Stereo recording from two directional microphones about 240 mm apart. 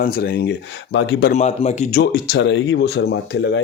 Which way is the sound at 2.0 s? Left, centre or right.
Left.